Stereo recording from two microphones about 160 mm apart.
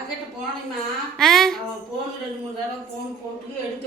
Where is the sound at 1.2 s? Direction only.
Centre (ahead or behind).